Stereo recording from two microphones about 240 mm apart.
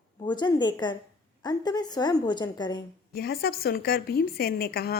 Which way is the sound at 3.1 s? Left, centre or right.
Left.